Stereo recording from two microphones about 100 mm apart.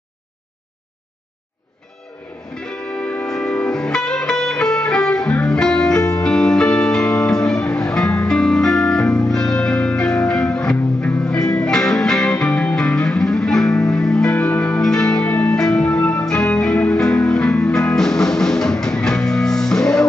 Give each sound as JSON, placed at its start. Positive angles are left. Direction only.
{"t": 2.5, "sound": "music", "side_deg": 10}
{"t": 15.9, "sound": "music", "side_deg": 30}
{"t": 16.3, "sound": "music", "side_deg": 10}